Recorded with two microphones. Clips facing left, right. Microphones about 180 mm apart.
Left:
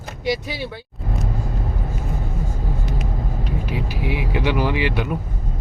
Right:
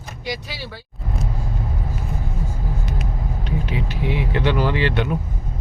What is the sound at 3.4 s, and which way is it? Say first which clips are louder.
Speech: right 2 dB; 5° left (ahead or behind).